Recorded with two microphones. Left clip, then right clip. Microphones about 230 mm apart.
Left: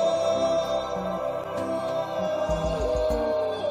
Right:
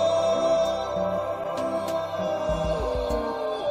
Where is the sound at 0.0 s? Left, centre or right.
Centre.